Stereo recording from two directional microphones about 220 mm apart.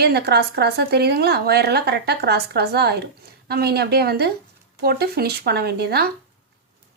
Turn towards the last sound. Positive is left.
turn(degrees=-45)  # may be behind; listen again after turning